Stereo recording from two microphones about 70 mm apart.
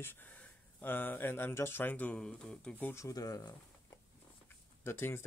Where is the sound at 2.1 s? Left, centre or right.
Centre.